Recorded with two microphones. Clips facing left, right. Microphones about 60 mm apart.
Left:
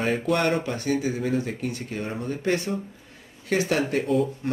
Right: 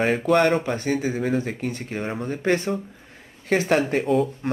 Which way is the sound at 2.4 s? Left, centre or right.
Right.